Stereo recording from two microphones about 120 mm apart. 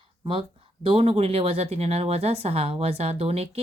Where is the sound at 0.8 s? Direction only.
45° right (ahead or behind).